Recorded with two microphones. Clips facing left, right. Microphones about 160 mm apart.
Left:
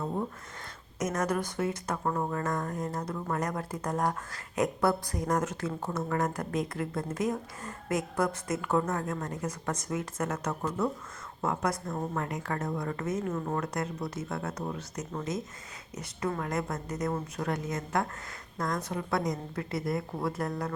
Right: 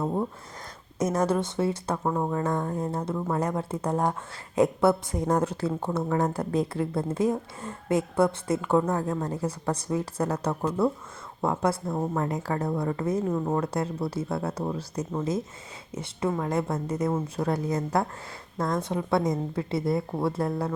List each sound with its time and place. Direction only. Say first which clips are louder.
0.9 s a woman's voice: right 5 dB; 30° right (ahead or behind)
16.4 s a woman's voice: right 5 dB; 30° right (ahead or behind)